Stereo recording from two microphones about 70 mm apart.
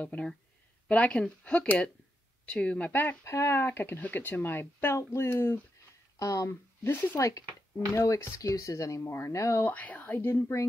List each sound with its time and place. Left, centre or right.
0.0 s speech: left
2.9 s speech: left
3.3 s speech: left
6.1 s speech: left
6.8 s speech: left
7.2 s speech: left
7.9 s speech: left
8.4 s speech: left
9.7 s speech: left